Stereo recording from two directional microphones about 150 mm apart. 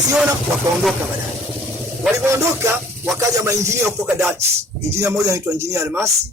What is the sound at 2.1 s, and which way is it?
A man's voice, 20° right (ahead or behind).